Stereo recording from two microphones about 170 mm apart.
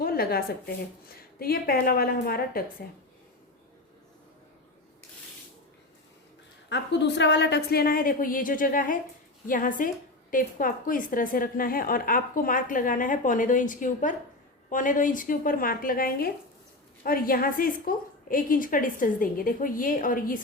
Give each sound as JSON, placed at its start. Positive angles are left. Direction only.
{"t": 0.0, "sound": "a woman's voice", "side_deg": 60}
{"t": 6.7, "sound": "a woman's voice", "side_deg": 90}